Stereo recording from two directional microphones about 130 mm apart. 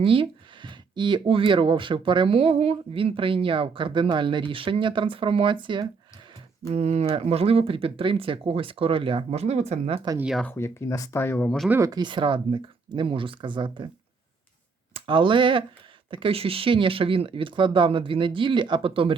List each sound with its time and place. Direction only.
0.0 s speech: 45° right (ahead or behind)
6.7 s speech: 55° right (ahead or behind)
10.5 s speech: 20° left (ahead or behind)
11.9 s speech: 35° right (ahead or behind)
14.9 s speech: 40° right (ahead or behind)